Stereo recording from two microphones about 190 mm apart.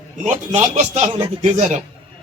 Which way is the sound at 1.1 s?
20° right (ahead or behind).